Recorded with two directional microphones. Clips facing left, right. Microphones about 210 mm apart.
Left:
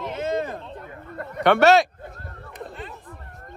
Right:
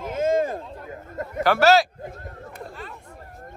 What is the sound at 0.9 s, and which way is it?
Speech, 25° right (ahead or behind).